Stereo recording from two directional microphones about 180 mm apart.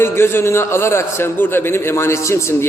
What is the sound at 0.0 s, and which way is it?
A man's voice, 15° left (ahead or behind).